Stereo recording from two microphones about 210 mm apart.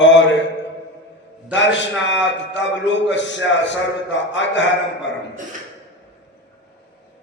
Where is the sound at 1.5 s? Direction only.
60° left (ahead or behind).